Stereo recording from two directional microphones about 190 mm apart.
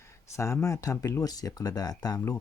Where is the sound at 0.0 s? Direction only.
15° left (ahead or behind).